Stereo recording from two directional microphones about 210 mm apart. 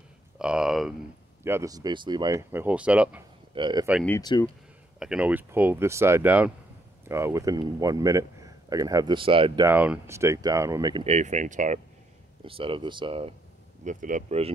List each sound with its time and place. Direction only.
0.4 s a sound: 5° right (ahead or behind)
1.4 s speech: 15° right (ahead or behind)
3.5 s speech: 20° right (ahead or behind)
4.2 s speech: 20° left (ahead or behind)
4.9 s speech: 5° right (ahead or behind); by 9.7 s 25° right (ahead or behind)
9.7 s speech: 10° right (ahead or behind)
11.1 s speech: 35° right (ahead or behind)
12.4 s speech: 25° right (ahead or behind)
13.8 s speech: 35° right (ahead or behind)